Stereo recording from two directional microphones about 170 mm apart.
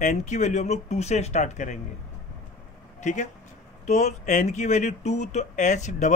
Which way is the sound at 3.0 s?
45° left (ahead or behind).